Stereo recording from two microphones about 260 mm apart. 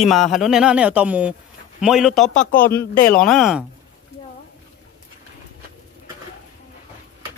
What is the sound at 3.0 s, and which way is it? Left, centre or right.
Speech, centre.